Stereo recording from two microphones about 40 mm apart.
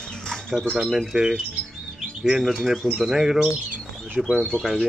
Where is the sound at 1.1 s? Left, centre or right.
Right.